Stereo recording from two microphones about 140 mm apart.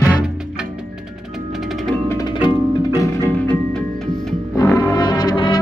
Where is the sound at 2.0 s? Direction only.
25° left (ahead or behind).